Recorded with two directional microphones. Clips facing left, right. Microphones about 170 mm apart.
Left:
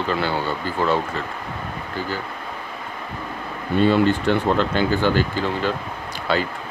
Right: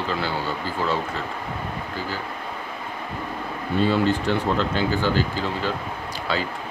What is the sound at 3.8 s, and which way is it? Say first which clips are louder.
Speech: left 4 dB; 60° left (ahead or behind).